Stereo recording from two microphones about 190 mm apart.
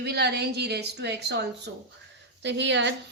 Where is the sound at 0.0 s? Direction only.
60° right (ahead or behind).